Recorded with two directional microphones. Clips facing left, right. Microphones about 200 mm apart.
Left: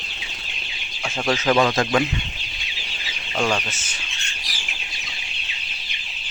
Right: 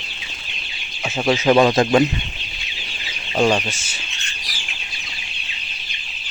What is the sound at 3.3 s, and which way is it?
Speech, 20° right (ahead or behind).